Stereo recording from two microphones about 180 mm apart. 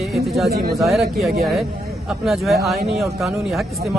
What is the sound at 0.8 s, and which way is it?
Speech, centre (ahead or behind).